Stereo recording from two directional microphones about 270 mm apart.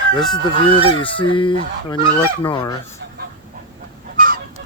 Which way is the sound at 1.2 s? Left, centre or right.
Centre.